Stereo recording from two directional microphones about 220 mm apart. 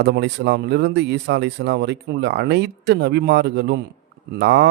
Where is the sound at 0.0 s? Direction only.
50° right (ahead or behind).